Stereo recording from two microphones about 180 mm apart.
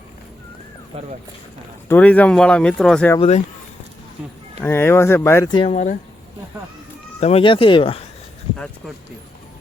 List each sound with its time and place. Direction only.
0.9 s speech: 35° right (ahead or behind)
1.9 s speech: 10° left (ahead or behind)
3.2 s speech: 40° left (ahead or behind)
4.6 s speech: 15° left (ahead or behind)
5.7 s speech: 45° left (ahead or behind)
7.2 s speech: 35° left (ahead or behind)